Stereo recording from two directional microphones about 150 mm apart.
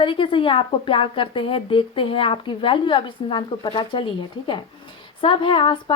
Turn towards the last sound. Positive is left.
turn(degrees=35)  # may be behind; listen again after turning